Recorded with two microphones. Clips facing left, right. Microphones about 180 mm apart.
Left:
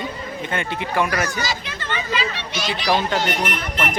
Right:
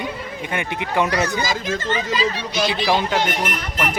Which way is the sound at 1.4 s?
45° right (ahead or behind).